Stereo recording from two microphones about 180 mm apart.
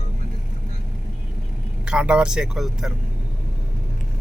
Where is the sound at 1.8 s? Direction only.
5° right (ahead or behind).